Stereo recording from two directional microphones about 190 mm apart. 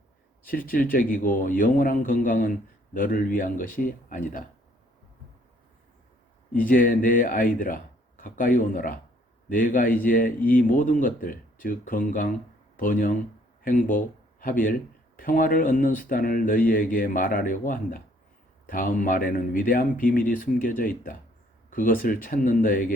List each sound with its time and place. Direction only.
0.4 s speech: 50° left (ahead or behind)
6.7 s speech: 45° left (ahead or behind)